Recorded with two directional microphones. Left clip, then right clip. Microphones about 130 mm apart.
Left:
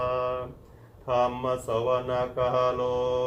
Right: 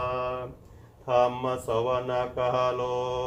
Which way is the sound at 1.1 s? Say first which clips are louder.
Right 1 dB; 25° right (ahead or behind).